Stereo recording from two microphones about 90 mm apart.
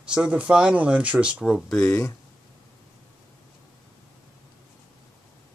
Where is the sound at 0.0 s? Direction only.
10° right (ahead or behind).